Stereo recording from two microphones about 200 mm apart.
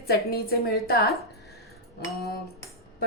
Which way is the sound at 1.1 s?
Centre (ahead or behind).